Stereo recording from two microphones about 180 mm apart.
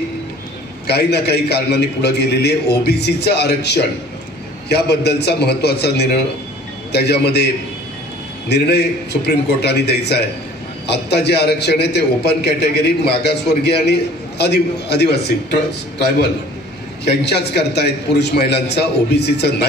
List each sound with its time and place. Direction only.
0.8 s a man's voice: 65° left (ahead or behind)
8.5 s a man's voice: 65° left (ahead or behind)
17.1 s a man's voice: 65° left (ahead or behind)